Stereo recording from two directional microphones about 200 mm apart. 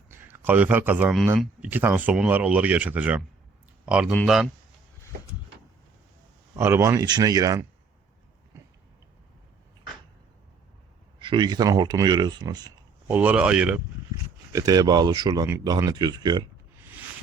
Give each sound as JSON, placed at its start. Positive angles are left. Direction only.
{"t": 0.1, "sound": "a man's voice", "side_deg": -10}
{"t": 6.6, "sound": "a man's voice", "side_deg": -15}
{"t": 8.5, "sound": "a sound", "side_deg": -15}
{"t": 11.2, "sound": "speech", "side_deg": -20}
{"t": 13.1, "sound": "speech", "side_deg": -5}
{"t": 14.5, "sound": "speech", "side_deg": -20}